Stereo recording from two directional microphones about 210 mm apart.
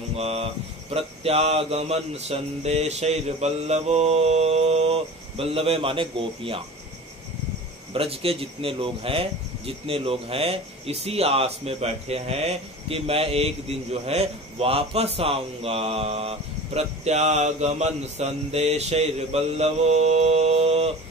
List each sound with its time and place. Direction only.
0.1 s speech: 30° right (ahead or behind)
7.9 s speech: 25° right (ahead or behind)